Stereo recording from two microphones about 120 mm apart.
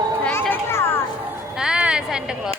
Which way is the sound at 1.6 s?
5° right (ahead or behind).